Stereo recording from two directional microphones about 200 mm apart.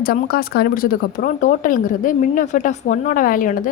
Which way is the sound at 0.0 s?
50° left (ahead or behind).